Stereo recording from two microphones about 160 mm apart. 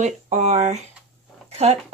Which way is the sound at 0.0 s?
45° right (ahead or behind).